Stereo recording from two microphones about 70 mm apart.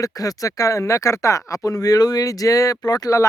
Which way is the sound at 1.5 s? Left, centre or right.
Left.